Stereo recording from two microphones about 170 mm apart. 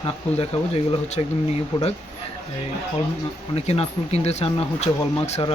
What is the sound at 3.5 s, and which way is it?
Speech, 35° left (ahead or behind).